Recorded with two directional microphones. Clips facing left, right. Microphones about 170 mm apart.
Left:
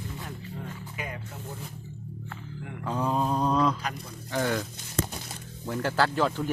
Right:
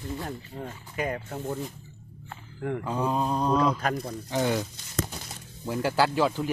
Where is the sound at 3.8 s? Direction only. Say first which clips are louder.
Right 7 dB; 55° right (ahead or behind).